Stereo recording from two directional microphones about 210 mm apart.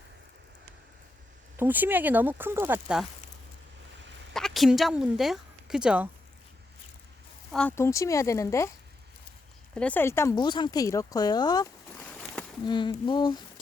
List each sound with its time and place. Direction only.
1.5 s speech: 10° right (ahead or behind)
4.4 s speech: centre (ahead or behind)
7.5 s speech: 10° left (ahead or behind)
9.7 s speech: 5° left (ahead or behind)
12.6 s a sound: 20° left (ahead or behind)